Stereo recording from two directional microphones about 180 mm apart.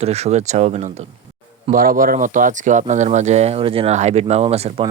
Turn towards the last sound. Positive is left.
turn(degrees=-35)  # may be behind; listen again after turning